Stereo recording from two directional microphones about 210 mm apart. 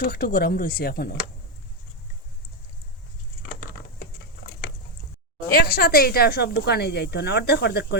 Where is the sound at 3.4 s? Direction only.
50° left (ahead or behind).